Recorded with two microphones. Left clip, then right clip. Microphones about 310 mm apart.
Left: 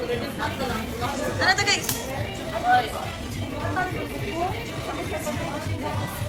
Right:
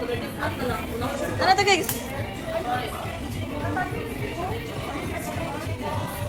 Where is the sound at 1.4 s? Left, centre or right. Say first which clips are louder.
Right 2 dB; centre.